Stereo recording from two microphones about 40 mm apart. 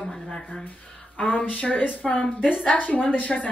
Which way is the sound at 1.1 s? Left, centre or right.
Left.